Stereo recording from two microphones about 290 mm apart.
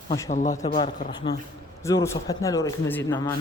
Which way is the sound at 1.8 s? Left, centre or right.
Centre.